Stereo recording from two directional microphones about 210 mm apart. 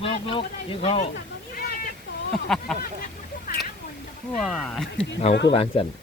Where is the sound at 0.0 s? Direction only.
25° left (ahead or behind).